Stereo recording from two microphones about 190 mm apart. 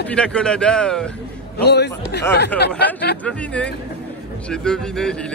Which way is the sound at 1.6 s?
60° left (ahead or behind).